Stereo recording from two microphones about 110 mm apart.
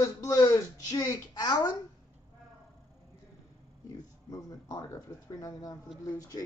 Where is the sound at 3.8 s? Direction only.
35° left (ahead or behind).